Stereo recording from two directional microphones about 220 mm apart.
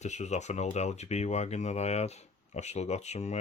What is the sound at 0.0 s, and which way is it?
Speech, 30° left (ahead or behind).